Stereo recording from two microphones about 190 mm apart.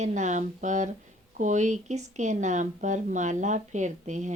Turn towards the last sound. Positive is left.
turn(degrees=-40)  # may be behind; listen again after turning